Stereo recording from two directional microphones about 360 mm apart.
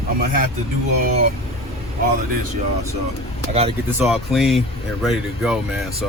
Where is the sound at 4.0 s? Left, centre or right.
Centre.